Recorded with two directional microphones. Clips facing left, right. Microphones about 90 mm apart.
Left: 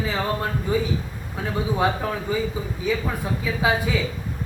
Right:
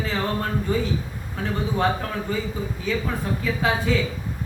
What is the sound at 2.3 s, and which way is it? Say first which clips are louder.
A man's voice: left 2 dB; 10° left (ahead or behind).